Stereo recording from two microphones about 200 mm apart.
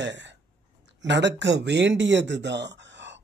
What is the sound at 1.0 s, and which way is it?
Speech, 60° right (ahead or behind).